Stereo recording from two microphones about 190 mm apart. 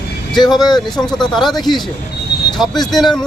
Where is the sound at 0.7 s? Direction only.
20° left (ahead or behind).